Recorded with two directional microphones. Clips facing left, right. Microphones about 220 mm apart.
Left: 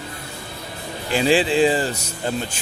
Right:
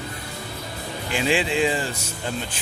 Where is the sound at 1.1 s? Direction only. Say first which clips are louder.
Left 5 dB; 35° left (ahead or behind).